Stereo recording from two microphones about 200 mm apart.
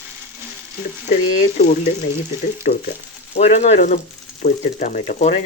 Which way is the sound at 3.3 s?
35° left (ahead or behind).